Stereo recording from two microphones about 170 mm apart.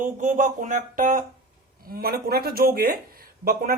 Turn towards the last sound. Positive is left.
turn(degrees=-60)  # may be behind; listen again after turning